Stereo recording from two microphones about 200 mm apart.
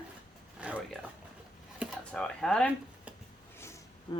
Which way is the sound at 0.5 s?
5° right (ahead or behind).